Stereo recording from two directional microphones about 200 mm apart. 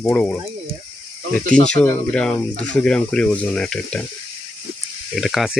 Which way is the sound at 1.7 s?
5° left (ahead or behind).